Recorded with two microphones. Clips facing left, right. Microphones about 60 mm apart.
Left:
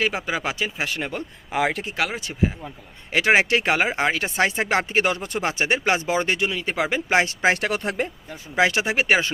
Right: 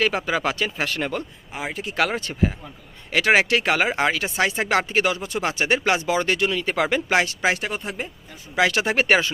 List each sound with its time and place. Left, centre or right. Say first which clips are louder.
0.0 s speech: right 2 dB; centre
1.5 s speech: left 13 dB; left
2.0 s speech: right 4 dB; centre
3.1 s speech: even; left
5.1 s speech: even; left
5.4 s speech: right 1 dB; left
7.5 s speech: left 4 dB; left
8.5 s speech: even; left